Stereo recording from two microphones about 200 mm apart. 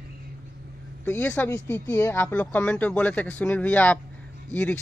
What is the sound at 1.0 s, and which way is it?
Speech, 5° left (ahead or behind).